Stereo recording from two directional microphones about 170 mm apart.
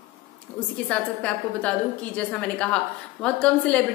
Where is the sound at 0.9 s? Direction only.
5° left (ahead or behind).